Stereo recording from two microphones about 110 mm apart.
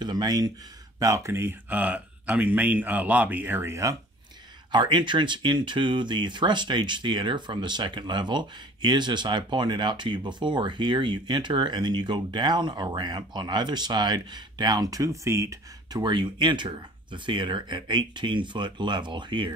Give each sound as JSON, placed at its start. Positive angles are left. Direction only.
{"t": 0.0, "sound": "speech", "side_deg": -40}
{"t": 4.7, "sound": "speech", "side_deg": -45}
{"t": 16.0, "sound": "speech", "side_deg": -40}